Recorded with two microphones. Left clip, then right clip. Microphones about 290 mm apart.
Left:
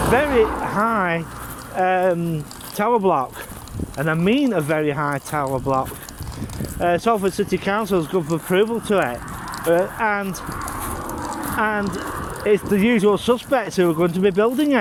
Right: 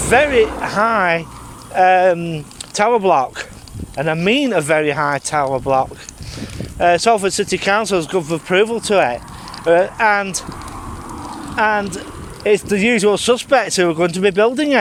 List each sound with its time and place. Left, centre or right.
0.1 s speech: right
11.5 s speech: right